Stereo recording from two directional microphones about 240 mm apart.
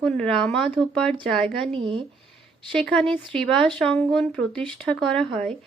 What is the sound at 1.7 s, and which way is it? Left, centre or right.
Speech, right.